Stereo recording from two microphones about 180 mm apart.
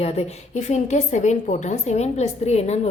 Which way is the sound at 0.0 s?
40° left (ahead or behind).